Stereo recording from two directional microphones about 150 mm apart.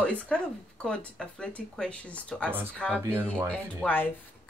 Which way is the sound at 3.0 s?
15° right (ahead or behind).